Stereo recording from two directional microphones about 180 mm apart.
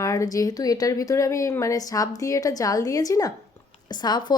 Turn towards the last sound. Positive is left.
turn(degrees=25)  # may be behind; listen again after turning